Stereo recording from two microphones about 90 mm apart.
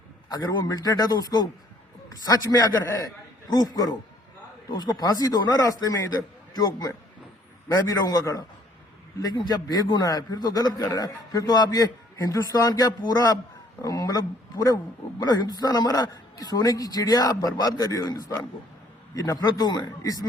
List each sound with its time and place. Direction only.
0.3 s a man's voice: 45° left (ahead or behind)
9.2 s a man's voice: 50° left (ahead or behind)